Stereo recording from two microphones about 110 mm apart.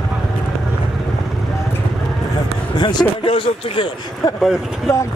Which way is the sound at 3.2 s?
55° left (ahead or behind).